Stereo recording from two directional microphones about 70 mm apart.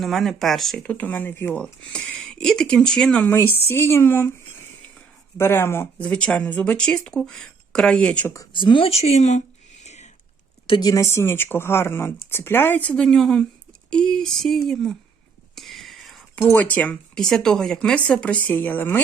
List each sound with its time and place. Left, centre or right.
0.0 s speech: centre
0.8 s speech: left
1.5 s speech: centre
3.2 s speech: left
5.4 s speech: left
6.0 s speech: centre
10.8 s speech: left
11.0 s speech: left
13.0 s speech: centre
15.5 s a sound: centre
16.5 s speech: left
17.2 s speech: centre; by 18.9 s left